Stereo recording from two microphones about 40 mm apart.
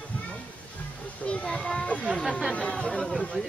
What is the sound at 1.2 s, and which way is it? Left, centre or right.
Children playing, left.